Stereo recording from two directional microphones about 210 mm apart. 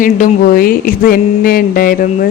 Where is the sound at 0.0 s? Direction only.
40° left (ahead or behind).